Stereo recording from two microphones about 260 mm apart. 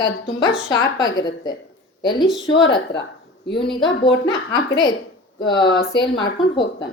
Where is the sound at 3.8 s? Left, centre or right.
Centre.